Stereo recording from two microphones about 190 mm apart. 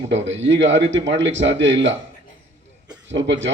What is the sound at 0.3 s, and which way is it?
A man's voice, 75° right (ahead or behind).